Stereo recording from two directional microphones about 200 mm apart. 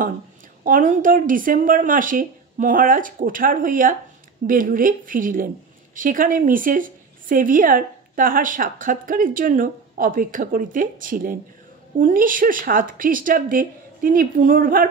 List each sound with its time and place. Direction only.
0.7 s a woman's voice: 40° right (ahead or behind)